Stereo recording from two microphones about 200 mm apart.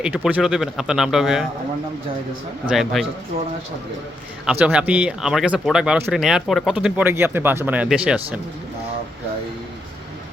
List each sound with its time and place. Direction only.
0.0 s speech: 5° right (ahead or behind)
2.6 s speech: centre (ahead or behind)
3.3 s speech: 45° right (ahead or behind)
4.4 s speech: 5° right (ahead or behind)